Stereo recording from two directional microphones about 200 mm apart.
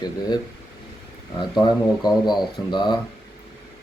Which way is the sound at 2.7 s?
20° left (ahead or behind).